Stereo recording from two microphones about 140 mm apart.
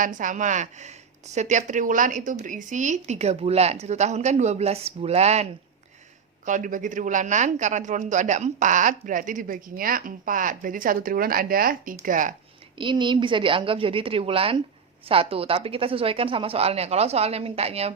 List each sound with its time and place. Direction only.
0.0 s a woman's voice: 70° right (ahead or behind); by 5.5 s 50° right (ahead or behind)
6.4 s speech: 65° right (ahead or behind); by 11.9 s 90° right
12.0 s speech: 70° right (ahead or behind)
12.8 s a woman's voice: 35° right (ahead or behind)